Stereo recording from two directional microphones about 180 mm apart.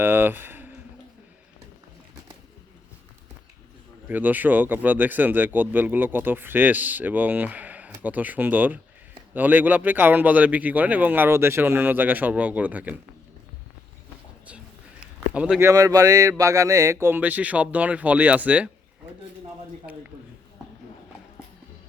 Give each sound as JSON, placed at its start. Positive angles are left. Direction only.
{"t": 0.0, "sound": "a sound", "side_deg": -10}
{"t": 4.1, "sound": "speech", "side_deg": -10}
{"t": 15.3, "sound": "speech", "side_deg": -5}
{"t": 15.7, "sound": "speech", "side_deg": -20}